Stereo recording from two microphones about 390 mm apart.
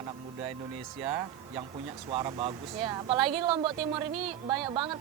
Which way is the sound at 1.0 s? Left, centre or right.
Centre.